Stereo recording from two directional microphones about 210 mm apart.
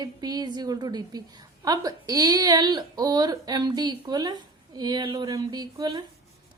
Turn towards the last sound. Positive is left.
turn(degrees=-15)  # may be behind; listen again after turning